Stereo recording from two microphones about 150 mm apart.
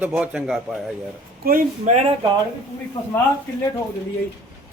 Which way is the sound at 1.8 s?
50° right (ahead or behind).